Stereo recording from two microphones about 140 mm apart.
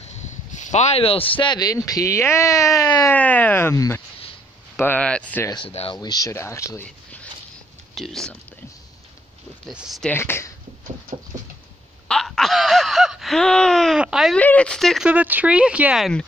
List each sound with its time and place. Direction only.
0.6 s speech: 55° left (ahead or behind); by 3.1 s 25° left (ahead or behind)
3.1 s speech: 10° left (ahead or behind)
5.7 s speech: 45° left (ahead or behind)
5.9 s speech: 25° left (ahead or behind)
7.9 s speech: centre (ahead or behind)
9.7 s speech: 5° right (ahead or behind)
10.0 s speech: 15° left (ahead or behind)
12.1 s a sound: centre (ahead or behind)
14.3 s speech: 10° left (ahead or behind)
15.0 s speech: 10° right (ahead or behind)